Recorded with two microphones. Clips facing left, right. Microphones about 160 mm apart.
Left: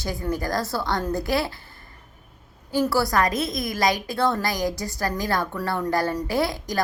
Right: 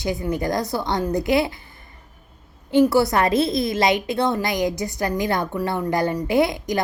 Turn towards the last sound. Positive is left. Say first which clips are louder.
# right 5 dB
turn(degrees=-20)  # may be behind; listen again after turning